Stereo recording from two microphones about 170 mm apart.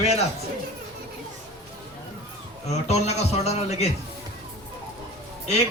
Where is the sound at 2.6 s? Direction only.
40° left (ahead or behind).